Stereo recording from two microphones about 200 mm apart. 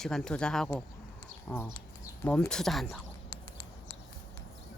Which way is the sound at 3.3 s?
25° left (ahead or behind).